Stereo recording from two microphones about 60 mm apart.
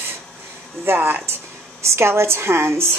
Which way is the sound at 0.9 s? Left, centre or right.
Right.